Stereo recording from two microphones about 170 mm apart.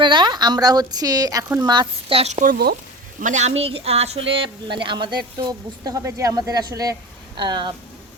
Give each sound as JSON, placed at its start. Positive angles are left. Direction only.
{"t": 0.0, "sound": "speech", "side_deg": -25}
{"t": 3.2, "sound": "speech", "side_deg": -45}